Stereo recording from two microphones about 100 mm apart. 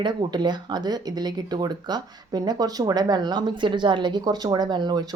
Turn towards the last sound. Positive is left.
turn(degrees=-45)  # may be behind; listen again after turning